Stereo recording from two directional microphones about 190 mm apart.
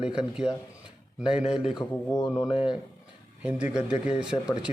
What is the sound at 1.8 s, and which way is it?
Speech, 20° left (ahead or behind).